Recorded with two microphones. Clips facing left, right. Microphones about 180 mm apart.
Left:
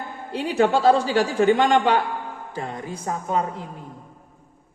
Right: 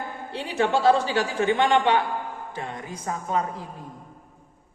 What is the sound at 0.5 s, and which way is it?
A woman's voice, 40° left (ahead or behind).